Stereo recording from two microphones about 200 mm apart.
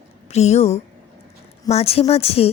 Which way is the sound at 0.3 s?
30° left (ahead or behind).